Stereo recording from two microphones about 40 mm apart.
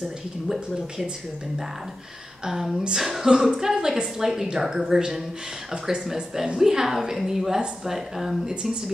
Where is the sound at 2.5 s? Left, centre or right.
Centre.